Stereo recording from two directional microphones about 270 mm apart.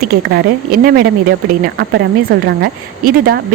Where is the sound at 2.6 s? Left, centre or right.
Right.